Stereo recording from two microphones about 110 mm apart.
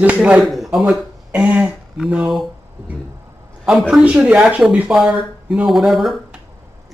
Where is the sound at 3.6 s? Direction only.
5° right (ahead or behind).